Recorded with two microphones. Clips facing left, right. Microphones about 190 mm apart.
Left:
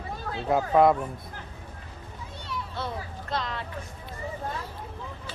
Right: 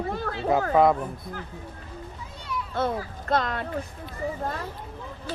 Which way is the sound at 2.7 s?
50° right (ahead or behind).